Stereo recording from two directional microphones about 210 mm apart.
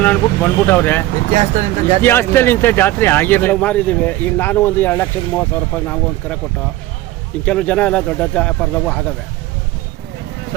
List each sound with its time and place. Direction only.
0.0 s speech: 10° left (ahead or behind)
1.3 s speech: 30° right (ahead or behind)
2.0 s speech: 10° left (ahead or behind)
7.4 s speech: 5° left (ahead or behind)